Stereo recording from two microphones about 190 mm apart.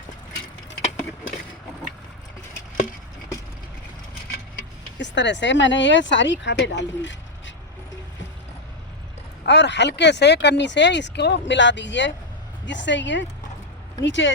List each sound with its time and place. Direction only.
4.9 s speech: 70° left (ahead or behind)
9.5 s speech: 65° left (ahead or behind)